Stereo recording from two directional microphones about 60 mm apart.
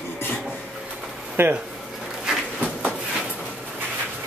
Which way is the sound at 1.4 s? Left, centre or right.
Right.